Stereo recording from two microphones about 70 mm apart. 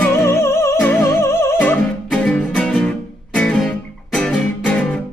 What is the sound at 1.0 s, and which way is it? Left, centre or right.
Music, left.